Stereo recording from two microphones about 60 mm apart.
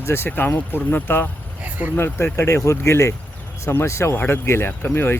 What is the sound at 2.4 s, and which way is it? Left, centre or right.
Speech, left.